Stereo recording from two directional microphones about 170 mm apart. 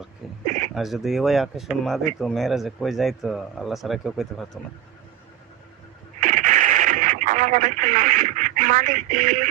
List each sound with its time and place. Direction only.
0.7 s speech: centre (ahead or behind)
6.1 s radio: 50° right (ahead or behind)